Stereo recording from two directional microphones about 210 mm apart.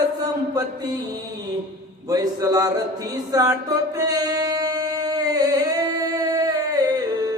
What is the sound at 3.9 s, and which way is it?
Singing, 15° right (ahead or behind).